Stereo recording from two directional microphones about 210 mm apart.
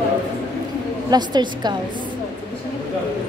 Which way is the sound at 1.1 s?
20° right (ahead or behind).